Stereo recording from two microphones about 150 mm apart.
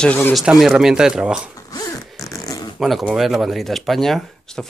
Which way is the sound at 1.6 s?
25° left (ahead or behind).